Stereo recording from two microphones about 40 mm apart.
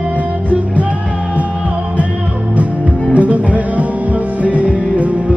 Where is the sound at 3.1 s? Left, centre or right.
Right.